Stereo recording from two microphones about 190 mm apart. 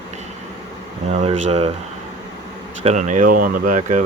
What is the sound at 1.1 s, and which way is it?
Speech, 35° right (ahead or behind).